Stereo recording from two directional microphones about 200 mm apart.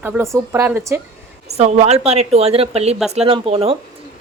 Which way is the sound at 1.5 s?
30° right (ahead or behind).